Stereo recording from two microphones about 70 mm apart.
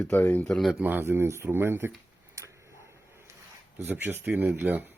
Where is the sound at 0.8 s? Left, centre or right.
Right.